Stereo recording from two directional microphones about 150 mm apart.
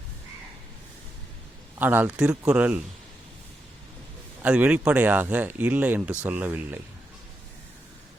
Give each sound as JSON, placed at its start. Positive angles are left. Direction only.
{"t": 1.8, "sound": "speech", "side_deg": -10}
{"t": 4.4, "sound": "speech", "side_deg": -10}